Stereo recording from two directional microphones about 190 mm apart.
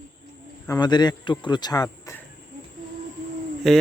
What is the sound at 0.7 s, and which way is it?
Speech, 20° left (ahead or behind).